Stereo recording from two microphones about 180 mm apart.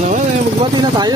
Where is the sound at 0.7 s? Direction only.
25° right (ahead or behind).